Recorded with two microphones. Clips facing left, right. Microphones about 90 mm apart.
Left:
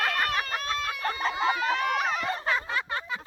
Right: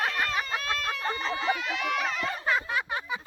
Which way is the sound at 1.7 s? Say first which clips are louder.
Left 3 dB; 40° left (ahead or behind).